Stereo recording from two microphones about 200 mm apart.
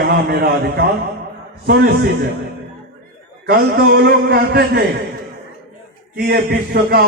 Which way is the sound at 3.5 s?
50° right (ahead or behind).